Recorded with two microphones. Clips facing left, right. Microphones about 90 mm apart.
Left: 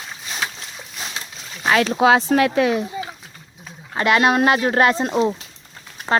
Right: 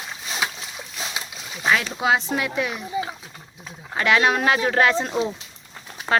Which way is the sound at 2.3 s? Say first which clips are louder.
Left 9 dB; 65° left (ahead or behind).